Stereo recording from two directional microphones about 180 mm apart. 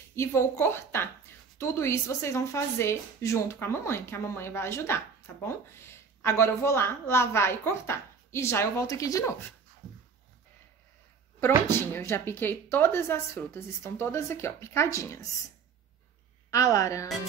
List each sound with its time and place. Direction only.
0.1 s a woman's voice: 15° left (ahead or behind)
11.4 s a woman's voice: 15° left (ahead or behind)
16.4 s a woman's voice: 20° left (ahead or behind)